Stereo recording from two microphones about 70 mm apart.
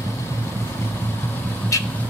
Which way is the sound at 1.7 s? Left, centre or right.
Left.